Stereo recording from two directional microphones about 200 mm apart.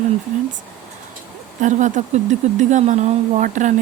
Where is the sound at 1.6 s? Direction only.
40° right (ahead or behind).